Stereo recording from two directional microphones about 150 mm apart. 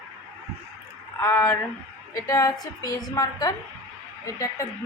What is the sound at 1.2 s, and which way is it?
A woman's voice, 15° left (ahead or behind).